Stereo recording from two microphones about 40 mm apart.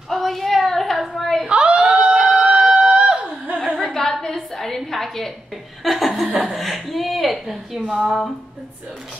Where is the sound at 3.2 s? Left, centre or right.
Right.